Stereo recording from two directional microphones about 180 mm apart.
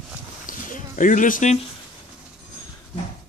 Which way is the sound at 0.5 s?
45° left (ahead or behind).